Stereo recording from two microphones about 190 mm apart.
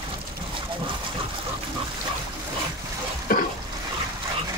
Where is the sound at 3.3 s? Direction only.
50° left (ahead or behind).